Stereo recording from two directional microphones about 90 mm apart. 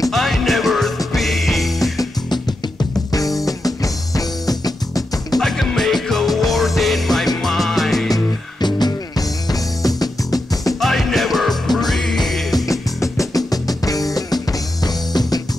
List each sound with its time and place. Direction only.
0.1 s music: centre (ahead or behind)
2.0 s music: 50° left (ahead or behind)
3.1 s music: 40° left (ahead or behind)
5.4 s music: centre (ahead or behind)
8.1 s music: 50° left (ahead or behind)
10.8 s music: 5° left (ahead or behind)
12.5 s music: 35° left (ahead or behind)